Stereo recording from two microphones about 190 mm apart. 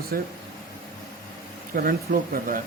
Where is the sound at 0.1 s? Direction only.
50° right (ahead or behind).